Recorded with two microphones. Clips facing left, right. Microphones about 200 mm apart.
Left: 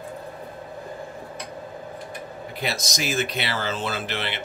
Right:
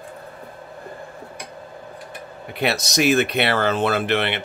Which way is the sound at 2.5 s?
65° right (ahead or behind).